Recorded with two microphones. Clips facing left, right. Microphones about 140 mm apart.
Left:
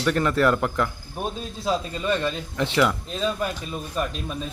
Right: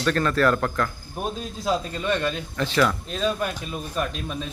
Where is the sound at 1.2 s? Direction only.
Centre (ahead or behind).